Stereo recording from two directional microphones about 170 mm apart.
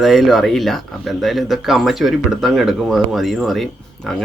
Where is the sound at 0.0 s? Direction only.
Centre (ahead or behind).